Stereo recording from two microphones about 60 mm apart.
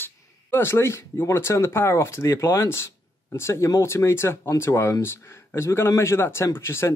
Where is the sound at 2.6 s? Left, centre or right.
Left.